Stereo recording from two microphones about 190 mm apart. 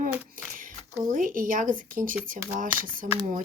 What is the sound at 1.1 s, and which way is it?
Speech, 45° right (ahead or behind).